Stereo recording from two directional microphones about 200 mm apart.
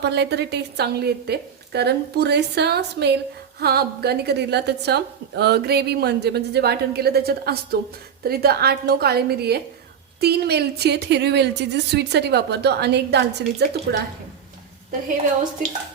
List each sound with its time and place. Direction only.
0.0 s a woman's voice: 55° right (ahead or behind)